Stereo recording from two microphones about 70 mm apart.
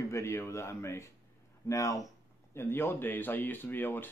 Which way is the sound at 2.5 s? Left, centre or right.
Left.